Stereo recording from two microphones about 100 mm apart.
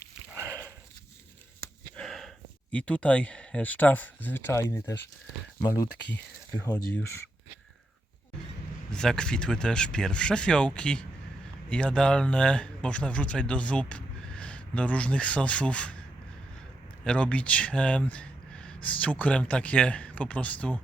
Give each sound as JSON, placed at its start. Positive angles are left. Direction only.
{"t": 0.3, "sound": "sniff", "side_deg": -25}
{"t": 2.0, "sound": "a sound", "side_deg": 5}
{"t": 2.7, "sound": "speech", "side_deg": 10}
{"t": 8.9, "sound": "speech", "side_deg": 5}
{"t": 17.0, "sound": "speech", "side_deg": 10}